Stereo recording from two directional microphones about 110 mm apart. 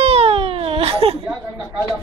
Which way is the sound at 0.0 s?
65° right (ahead or behind).